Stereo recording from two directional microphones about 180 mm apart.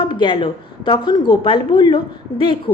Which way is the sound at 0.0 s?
25° left (ahead or behind).